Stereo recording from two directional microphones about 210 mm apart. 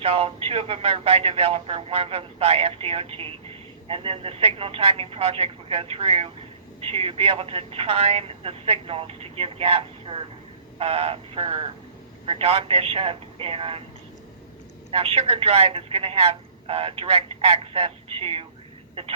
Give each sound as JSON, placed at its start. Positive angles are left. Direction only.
{"t": 0.0, "sound": "speech", "side_deg": -25}
{"t": 14.8, "sound": "speech", "side_deg": -30}